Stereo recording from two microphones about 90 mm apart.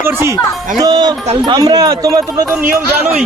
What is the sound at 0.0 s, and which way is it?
Speech, 25° right (ahead or behind).